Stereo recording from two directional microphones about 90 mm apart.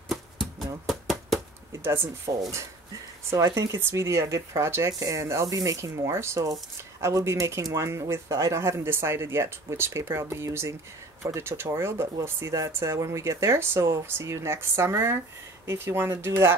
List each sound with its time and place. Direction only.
0.1 s a sound: centre (ahead or behind)
1.7 s speech: 25° right (ahead or behind)
4.9 s speech: 45° right (ahead or behind)
5.2 s speech: 30° right (ahead or behind)